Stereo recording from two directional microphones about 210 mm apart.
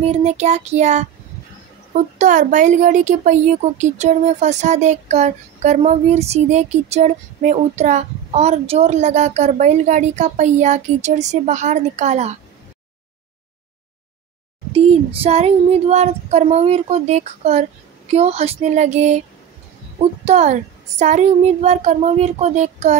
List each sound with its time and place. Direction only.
0.0 s a woman's voice: 30° right (ahead or behind)
2.1 s a woman's voice: 35° right (ahead or behind)
14.7 s a woman's voice: 30° right (ahead or behind)
20.2 s a woman's voice: 35° right (ahead or behind)